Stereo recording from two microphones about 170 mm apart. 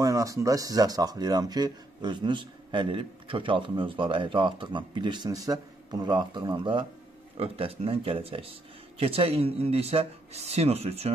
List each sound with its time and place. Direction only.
0.0 s speech: 20° right (ahead or behind); by 11.1 s 35° right (ahead or behind)